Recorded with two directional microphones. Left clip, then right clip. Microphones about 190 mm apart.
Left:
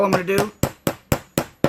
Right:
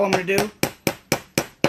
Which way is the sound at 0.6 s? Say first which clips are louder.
Even; 10° left (ahead or behind).